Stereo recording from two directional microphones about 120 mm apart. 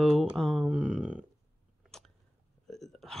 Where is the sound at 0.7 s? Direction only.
10° right (ahead or behind).